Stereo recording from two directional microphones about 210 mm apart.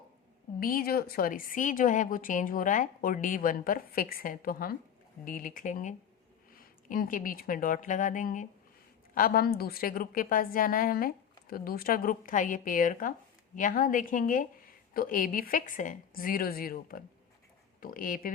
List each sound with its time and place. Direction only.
0.6 s a woman's voice: 45° left (ahead or behind)